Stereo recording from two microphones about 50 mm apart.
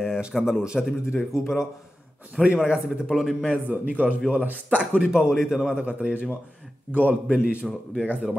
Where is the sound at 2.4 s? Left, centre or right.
Right.